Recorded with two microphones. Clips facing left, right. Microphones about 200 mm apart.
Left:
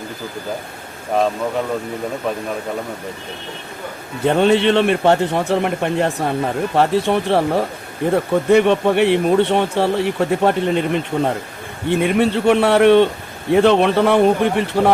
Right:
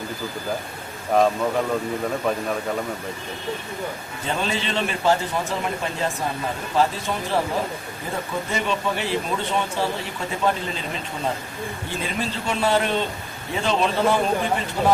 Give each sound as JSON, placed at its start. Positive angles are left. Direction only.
{"t": 4.2, "sound": "speech", "side_deg": 65}